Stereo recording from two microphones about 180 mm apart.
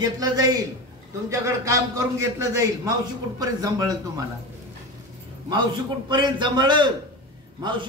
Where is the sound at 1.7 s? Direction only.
15° right (ahead or behind).